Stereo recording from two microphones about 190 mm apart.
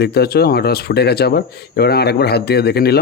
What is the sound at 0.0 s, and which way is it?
Speech, 55° left (ahead or behind).